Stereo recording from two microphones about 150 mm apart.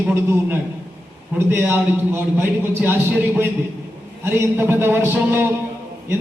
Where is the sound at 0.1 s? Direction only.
15° right (ahead or behind).